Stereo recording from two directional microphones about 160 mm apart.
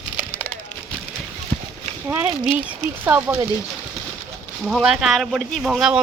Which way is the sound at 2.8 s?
10° right (ahead or behind).